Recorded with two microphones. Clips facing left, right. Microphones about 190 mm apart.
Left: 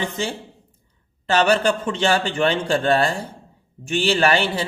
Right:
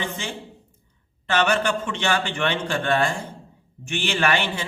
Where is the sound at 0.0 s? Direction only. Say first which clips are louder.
Left 5 dB; 35° left (ahead or behind).